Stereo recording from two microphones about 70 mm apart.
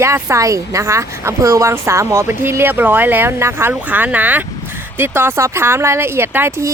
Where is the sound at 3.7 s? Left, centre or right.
Right.